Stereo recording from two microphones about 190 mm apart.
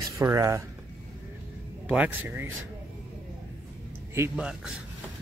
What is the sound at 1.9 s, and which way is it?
Speech, 10° right (ahead or behind).